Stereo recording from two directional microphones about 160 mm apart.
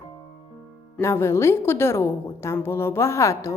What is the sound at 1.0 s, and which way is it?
A woman's voice, 15° left (ahead or behind).